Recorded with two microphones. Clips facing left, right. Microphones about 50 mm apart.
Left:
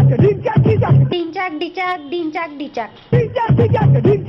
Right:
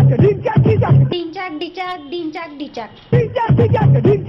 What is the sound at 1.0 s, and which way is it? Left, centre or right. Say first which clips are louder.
A child's voice: left 2 dB; left.